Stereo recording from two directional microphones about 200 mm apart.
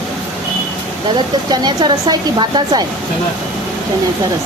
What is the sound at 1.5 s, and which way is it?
Speech, 20° right (ahead or behind).